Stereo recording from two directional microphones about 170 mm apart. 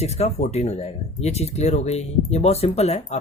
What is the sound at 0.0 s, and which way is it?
Speech, 40° left (ahead or behind).